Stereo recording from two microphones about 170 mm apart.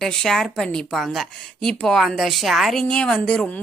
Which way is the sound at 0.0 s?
Centre (ahead or behind).